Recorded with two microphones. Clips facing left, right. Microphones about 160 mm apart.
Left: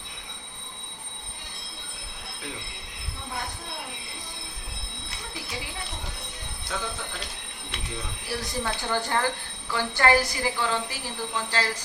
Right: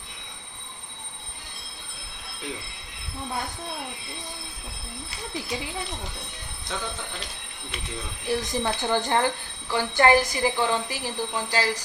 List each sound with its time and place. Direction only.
8.3 s a woman's voice: 20° right (ahead or behind)